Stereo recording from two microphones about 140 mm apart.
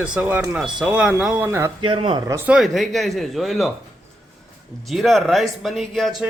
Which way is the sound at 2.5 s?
Centre (ahead or behind).